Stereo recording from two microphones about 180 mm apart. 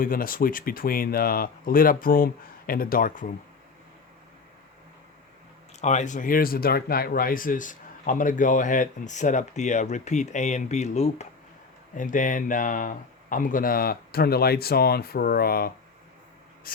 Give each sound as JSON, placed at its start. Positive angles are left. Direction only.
{"t": 0.0, "sound": "speech", "side_deg": 50}
{"t": 5.8, "sound": "speech", "side_deg": 40}
{"t": 16.7, "sound": "a sound", "side_deg": 55}